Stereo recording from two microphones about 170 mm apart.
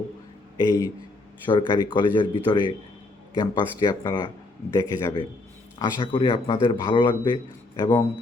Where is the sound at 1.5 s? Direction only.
30° left (ahead or behind).